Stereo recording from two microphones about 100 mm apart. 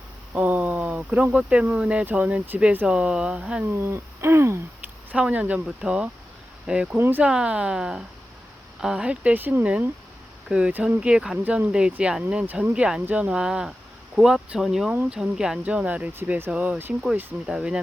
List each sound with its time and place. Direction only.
0.3 s speech: 15° right (ahead or behind)
3.7 s a sound: 25° right (ahead or behind)
5.1 s speech: 10° right (ahead or behind)